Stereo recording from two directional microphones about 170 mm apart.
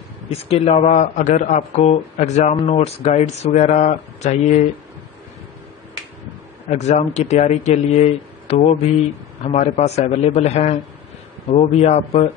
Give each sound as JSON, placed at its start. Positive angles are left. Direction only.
{"t": 0.3, "sound": "a man's voice", "side_deg": 35}
{"t": 6.7, "sound": "a man's voice", "side_deg": 40}